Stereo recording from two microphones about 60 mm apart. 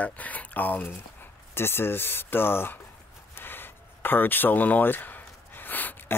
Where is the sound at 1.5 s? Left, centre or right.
Left.